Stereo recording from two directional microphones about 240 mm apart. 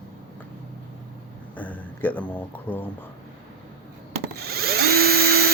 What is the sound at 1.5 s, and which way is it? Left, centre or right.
Speech, centre.